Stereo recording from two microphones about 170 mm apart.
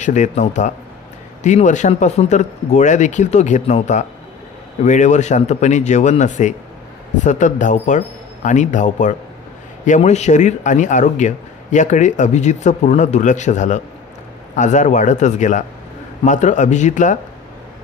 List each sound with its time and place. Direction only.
0.0 s speech: 45° left (ahead or behind)